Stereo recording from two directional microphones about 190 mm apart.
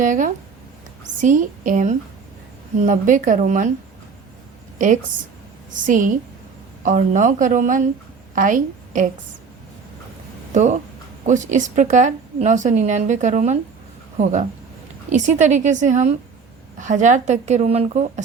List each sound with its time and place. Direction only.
0.0 s a woman's voice: 40° right (ahead or behind)
5.8 s a woman's voice: 45° right (ahead or behind)
10.5 s a woman's voice: 40° right (ahead or behind)